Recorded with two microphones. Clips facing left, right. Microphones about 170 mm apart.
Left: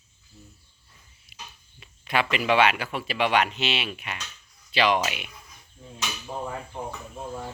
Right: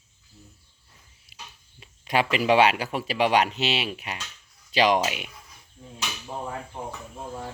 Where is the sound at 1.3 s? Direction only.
35° right (ahead or behind).